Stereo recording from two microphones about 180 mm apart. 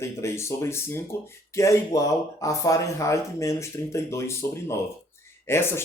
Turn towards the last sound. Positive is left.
turn(degrees=15)  # may be behind; listen again after turning